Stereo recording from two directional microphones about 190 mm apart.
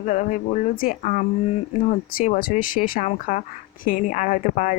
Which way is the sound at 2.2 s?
45° left (ahead or behind).